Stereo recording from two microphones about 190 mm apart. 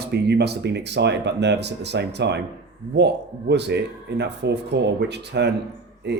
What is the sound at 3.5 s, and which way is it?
Speech, 65° right (ahead or behind).